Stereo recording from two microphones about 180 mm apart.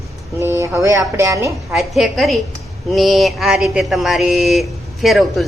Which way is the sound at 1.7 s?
Centre (ahead or behind).